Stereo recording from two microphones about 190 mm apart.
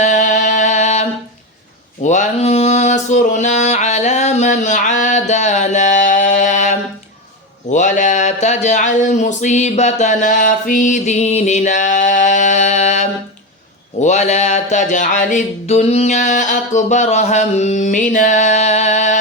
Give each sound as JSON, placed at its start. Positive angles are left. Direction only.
{"t": 0.0, "sound": "music", "side_deg": 40}
{"t": 2.0, "sound": "a sound", "side_deg": 40}
{"t": 7.7, "sound": "speech", "side_deg": 40}
{"t": 14.0, "sound": "music", "side_deg": 40}